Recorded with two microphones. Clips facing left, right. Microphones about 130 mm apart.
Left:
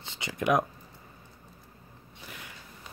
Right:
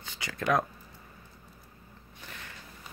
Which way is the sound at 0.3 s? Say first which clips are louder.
Left 2 dB; 20° left (ahead or behind).